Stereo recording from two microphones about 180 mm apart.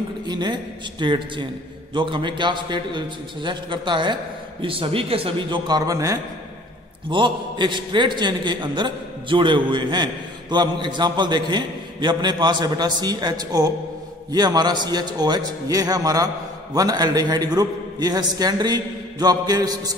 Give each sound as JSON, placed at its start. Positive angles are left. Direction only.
{"t": 0.3, "sound": "a man's voice", "side_deg": -25}